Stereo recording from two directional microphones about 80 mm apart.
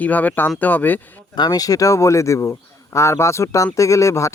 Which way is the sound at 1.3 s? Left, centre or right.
Left.